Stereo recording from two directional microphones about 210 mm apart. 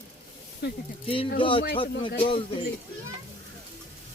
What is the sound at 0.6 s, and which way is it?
Speech, 55° left (ahead or behind).